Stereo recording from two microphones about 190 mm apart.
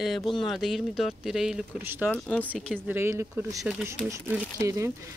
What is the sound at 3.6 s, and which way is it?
Speech, centre (ahead or behind).